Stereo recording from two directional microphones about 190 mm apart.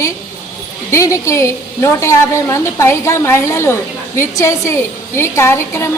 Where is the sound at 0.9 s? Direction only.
15° left (ahead or behind).